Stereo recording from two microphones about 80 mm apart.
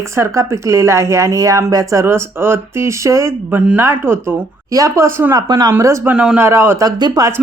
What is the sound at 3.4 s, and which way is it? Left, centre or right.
Speech, right.